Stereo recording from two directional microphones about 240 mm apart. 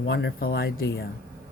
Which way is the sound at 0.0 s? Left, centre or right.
Left.